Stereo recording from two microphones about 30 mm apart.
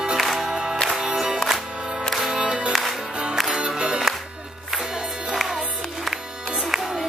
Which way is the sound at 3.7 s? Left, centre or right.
Right.